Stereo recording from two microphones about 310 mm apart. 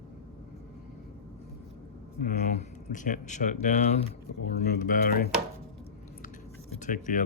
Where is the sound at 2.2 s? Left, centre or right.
Left.